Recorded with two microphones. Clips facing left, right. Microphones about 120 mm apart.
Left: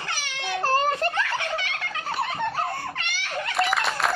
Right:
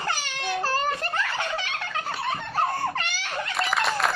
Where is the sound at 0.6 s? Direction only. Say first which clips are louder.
Left 5 dB; 50° left (ahead or behind).